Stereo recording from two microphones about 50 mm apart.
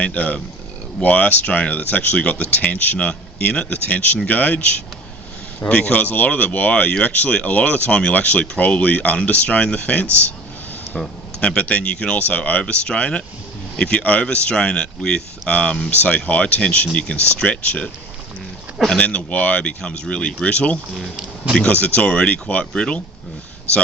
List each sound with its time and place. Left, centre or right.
0.0 s speech: left
11.3 s speech: left
12.6 s speech: centre
14.3 s speech: centre
18.9 s speech: left
20.9 s speech: centre
21.5 s speech: left